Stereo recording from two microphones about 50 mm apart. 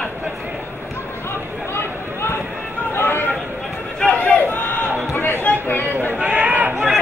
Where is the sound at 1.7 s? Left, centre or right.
Left.